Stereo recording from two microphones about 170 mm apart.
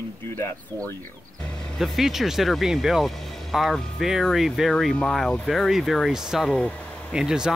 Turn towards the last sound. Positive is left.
turn(degrees=-5)  # may be behind; listen again after turning